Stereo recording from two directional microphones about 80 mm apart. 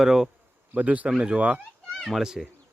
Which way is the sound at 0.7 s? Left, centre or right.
Centre.